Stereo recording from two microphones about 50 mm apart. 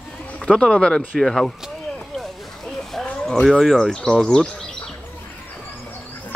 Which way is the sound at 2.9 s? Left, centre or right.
Centre.